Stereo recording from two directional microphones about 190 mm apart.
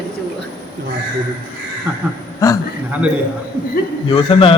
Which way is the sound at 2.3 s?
15° left (ahead or behind).